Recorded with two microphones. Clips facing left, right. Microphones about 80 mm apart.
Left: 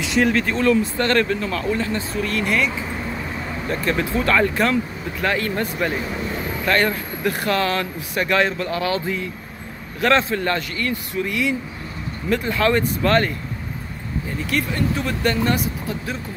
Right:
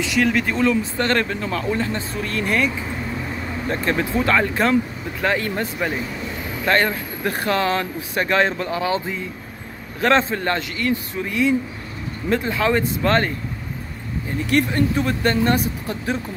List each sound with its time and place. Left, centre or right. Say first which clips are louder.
0.3 s speech: left 1 dB; centre
1.8 s speech: left 1 dB; right
3.8 s speech: even; right
14.4 s speech: right 5 dB; right